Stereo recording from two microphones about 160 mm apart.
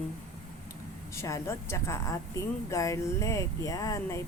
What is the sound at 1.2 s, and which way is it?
A woman's voice, 20° left (ahead or behind).